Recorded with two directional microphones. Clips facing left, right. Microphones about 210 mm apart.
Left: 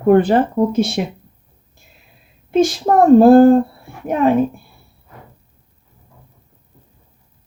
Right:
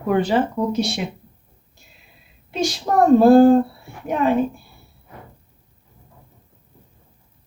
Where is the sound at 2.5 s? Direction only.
50° left (ahead or behind).